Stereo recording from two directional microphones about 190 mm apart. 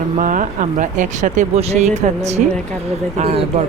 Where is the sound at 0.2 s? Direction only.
45° right (ahead or behind).